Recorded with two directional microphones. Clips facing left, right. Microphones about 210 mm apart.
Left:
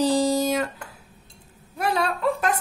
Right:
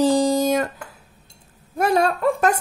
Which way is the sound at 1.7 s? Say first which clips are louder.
Right 6 dB; 45° right (ahead or behind).